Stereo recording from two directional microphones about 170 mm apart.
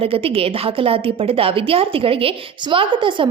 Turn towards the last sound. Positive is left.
turn(degrees=-30)  # may be behind; listen again after turning